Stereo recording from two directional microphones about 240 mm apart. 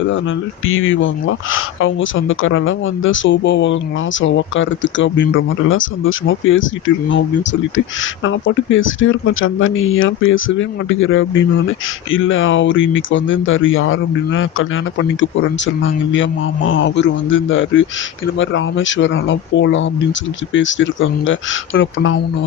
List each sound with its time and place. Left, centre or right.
0.7 s speech: left